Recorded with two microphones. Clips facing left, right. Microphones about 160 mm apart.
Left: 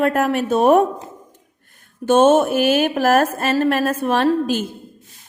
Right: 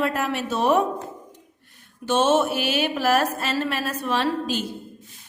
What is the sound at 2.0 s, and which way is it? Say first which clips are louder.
A woman's voice: left 7 dB; 50° left (ahead or behind).